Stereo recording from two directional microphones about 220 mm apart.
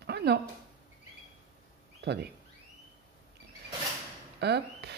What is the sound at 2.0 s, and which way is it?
Speech, 50° right (ahead or behind).